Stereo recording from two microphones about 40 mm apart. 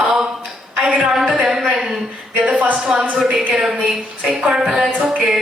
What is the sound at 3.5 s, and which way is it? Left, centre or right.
Speech, centre.